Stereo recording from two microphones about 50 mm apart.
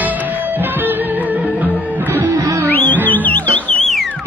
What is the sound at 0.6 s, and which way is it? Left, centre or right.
Music, right.